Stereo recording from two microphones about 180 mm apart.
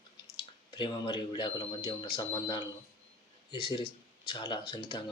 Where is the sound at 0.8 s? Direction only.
25° left (ahead or behind).